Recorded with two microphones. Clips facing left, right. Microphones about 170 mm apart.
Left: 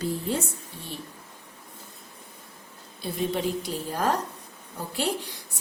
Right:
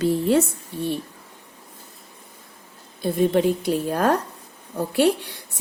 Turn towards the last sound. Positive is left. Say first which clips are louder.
# right 9 dB
turn(degrees=-65)  # may be behind; listen again after turning